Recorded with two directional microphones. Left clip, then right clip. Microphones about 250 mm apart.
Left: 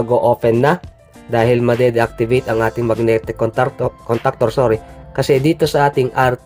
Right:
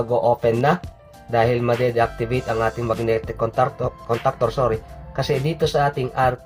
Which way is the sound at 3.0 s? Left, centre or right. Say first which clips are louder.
Left 6 dB; left.